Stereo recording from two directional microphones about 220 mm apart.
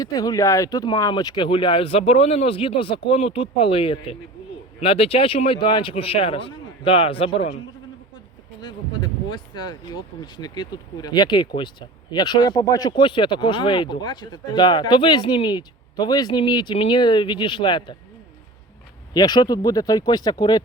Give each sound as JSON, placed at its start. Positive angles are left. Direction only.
{"t": 0.0, "sound": "speech", "side_deg": 15}
{"t": 8.6, "sound": "speech", "side_deg": 20}
{"t": 19.1, "sound": "speech", "side_deg": 20}